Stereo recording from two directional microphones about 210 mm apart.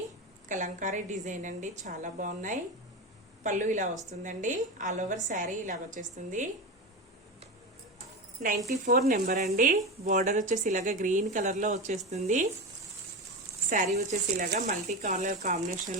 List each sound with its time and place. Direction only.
0.4 s a woman's voice: 35° right (ahead or behind)
7.9 s a sound: 40° right (ahead or behind)
8.7 s a woman's voice: 45° right (ahead or behind)
13.7 s a woman's voice: 35° right (ahead or behind)